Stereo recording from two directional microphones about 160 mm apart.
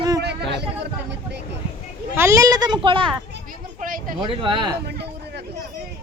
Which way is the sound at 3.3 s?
60° right (ahead or behind).